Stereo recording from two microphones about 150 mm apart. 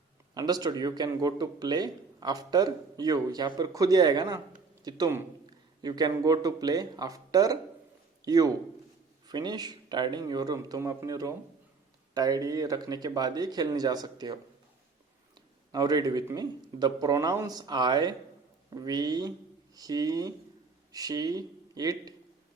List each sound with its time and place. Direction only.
0.3 s a man's voice: 25° right (ahead or behind)
15.4 s a sound: 25° right (ahead or behind)
16.2 s a man's voice: 25° right (ahead or behind)